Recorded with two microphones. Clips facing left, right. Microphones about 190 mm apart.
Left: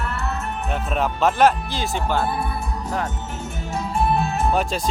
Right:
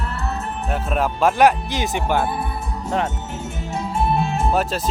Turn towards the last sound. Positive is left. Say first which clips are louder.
# right 1 dB
turn(degrees=-5)  # may be behind; listen again after turning